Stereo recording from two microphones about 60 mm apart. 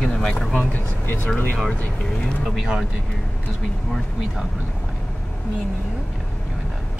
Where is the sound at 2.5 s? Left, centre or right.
Centre.